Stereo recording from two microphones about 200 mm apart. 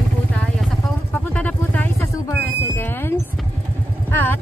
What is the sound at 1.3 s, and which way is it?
Vehicle, 5° left (ahead or behind).